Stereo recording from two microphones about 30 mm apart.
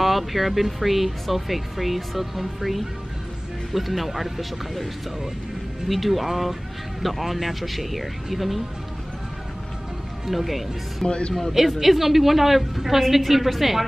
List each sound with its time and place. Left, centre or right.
0.0 s speech: centre
5.9 s speech: centre
10.2 s speech: centre
11.1 s speech: left
11.5 s a woman's voice: centre